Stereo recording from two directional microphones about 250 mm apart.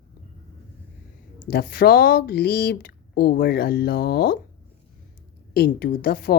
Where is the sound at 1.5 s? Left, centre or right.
Left.